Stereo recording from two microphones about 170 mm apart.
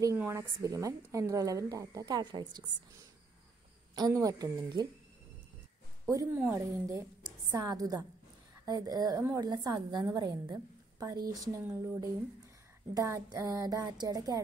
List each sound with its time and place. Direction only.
0.0 s a woman's voice: 15° right (ahead or behind)
3.9 s a woman's voice: 20° right (ahead or behind)
6.0 s a woman's voice: 15° right (ahead or behind)